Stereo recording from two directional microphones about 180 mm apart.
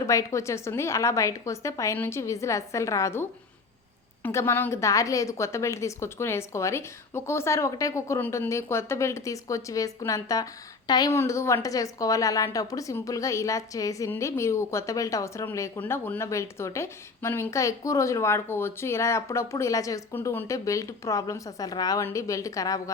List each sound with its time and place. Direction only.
0.1 s a woman's voice: 15° left (ahead or behind)